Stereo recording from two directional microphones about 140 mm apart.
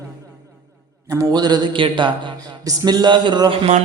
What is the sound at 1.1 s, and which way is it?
Speech, 25° right (ahead or behind).